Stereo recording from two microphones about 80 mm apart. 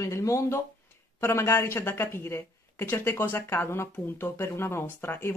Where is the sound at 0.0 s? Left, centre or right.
Left.